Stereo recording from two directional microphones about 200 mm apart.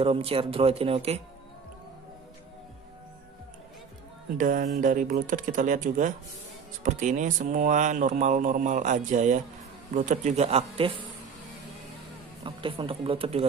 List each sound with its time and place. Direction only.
0.0 s speech: 30° right (ahead or behind)
4.4 s speech: 40° right (ahead or behind)
12.4 s speech: 25° right (ahead or behind)